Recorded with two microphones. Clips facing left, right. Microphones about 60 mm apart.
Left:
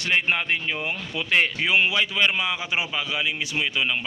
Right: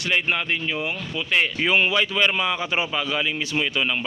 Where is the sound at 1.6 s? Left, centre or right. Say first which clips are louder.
Right 1 dB; centre.